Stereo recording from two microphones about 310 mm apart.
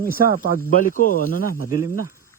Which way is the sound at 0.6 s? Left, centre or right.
Left.